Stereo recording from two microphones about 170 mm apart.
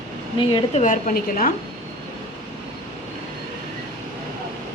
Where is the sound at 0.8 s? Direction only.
50° left (ahead or behind).